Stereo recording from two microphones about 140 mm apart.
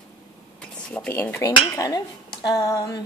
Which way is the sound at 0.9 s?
10° left (ahead or behind).